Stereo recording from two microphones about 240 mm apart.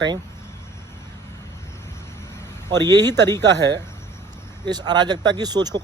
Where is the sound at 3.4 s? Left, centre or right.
Right.